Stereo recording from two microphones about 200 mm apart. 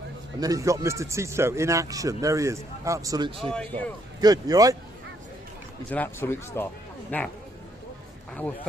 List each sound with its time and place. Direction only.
0.3 s speech: 15° right (ahead or behind)
3.5 s speech: 5° left (ahead or behind)
4.2 s speech: 20° right (ahead or behind)
5.9 s speech: 10° left (ahead or behind)